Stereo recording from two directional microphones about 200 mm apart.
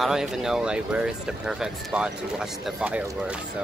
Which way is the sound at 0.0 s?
5° right (ahead or behind).